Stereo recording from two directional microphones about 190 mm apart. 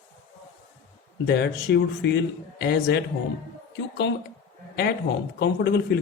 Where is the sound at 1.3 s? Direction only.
60° left (ahead or behind).